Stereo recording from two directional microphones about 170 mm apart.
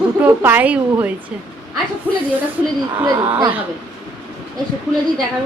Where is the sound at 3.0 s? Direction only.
25° right (ahead or behind).